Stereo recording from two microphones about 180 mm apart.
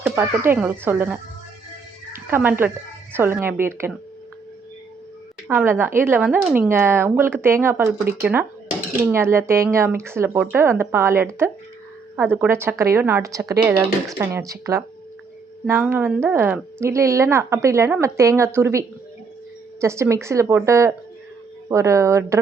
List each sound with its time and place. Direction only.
0.0 s speech: 10° right (ahead or behind)
5.5 s speech: 10° right (ahead or behind)